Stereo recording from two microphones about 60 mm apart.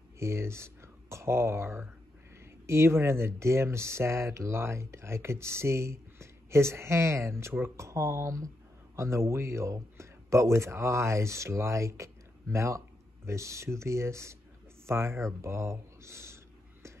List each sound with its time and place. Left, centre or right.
0.2 s speech: right